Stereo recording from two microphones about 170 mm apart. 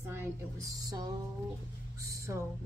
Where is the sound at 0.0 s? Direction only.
15° right (ahead or behind).